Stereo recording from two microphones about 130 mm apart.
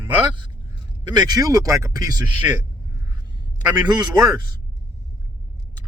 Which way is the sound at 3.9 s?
35° right (ahead or behind).